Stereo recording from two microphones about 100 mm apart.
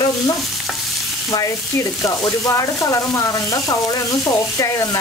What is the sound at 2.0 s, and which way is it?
Speech, 30° left (ahead or behind).